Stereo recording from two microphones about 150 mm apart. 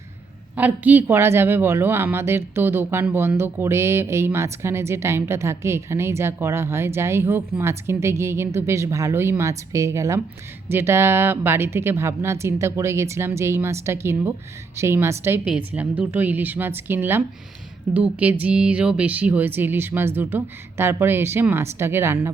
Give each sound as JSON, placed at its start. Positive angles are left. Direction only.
{"t": 0.5, "sound": "speech", "side_deg": -10}